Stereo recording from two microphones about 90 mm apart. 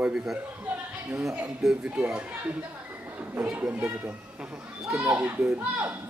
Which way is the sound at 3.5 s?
15° right (ahead or behind).